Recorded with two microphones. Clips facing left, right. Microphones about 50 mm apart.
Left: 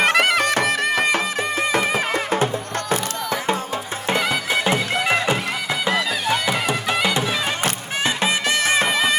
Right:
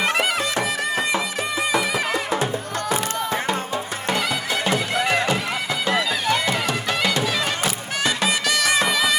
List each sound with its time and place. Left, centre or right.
0.0 s music: left
4.1 s music: left
6.2 s music: centre
8.0 s music: left